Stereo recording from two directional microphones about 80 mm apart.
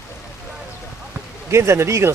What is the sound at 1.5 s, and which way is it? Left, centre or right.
Speech, right.